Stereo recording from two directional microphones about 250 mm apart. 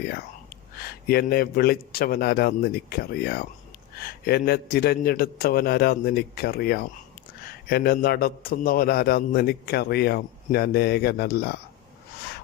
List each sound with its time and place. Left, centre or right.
1.0 s a man's voice: left